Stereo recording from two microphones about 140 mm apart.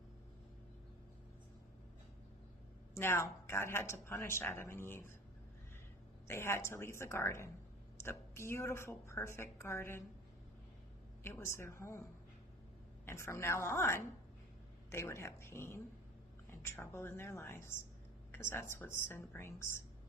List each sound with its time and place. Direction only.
2.9 s a woman's voice: 20° left (ahead or behind)
6.2 s a woman's voice: 20° left (ahead or behind)
11.2 s a woman's voice: 20° left (ahead or behind)
13.1 s a woman's voice: 20° left (ahead or behind)